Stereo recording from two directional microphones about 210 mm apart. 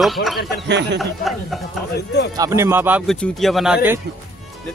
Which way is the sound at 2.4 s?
15° right (ahead or behind).